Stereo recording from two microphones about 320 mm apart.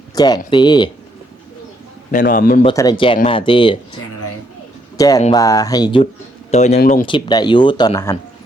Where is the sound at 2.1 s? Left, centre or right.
Left.